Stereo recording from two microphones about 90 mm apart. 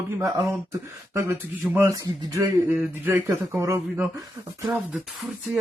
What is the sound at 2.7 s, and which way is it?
Speech, 20° right (ahead or behind).